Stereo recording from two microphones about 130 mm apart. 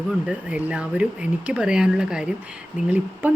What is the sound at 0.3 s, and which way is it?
Speech, 10° right (ahead or behind).